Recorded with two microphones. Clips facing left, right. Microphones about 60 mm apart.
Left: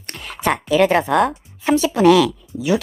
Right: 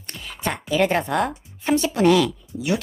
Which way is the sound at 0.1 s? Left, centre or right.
Left.